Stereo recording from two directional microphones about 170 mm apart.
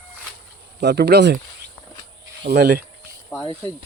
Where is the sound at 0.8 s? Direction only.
80° right.